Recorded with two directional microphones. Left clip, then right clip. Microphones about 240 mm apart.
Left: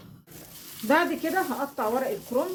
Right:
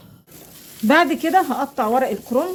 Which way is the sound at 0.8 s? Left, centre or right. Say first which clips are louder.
Right 8 dB; right.